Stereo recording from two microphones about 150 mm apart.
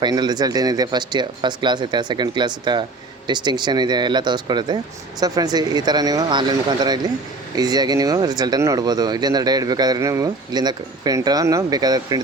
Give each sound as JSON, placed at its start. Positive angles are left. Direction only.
{"t": 0.0, "sound": "speech", "side_deg": -30}